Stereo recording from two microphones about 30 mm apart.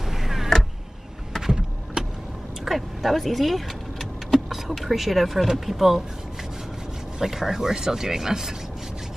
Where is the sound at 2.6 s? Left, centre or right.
Centre.